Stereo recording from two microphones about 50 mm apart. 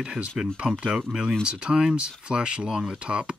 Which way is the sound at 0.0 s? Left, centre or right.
Right.